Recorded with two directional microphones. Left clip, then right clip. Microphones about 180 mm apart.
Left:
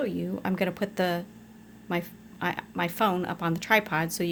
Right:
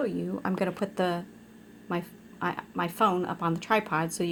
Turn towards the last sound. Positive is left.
turn(degrees=10)  # may be behind; listen again after turning